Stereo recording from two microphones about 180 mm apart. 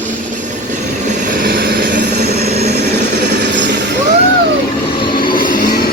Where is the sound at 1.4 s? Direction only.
55° right (ahead or behind).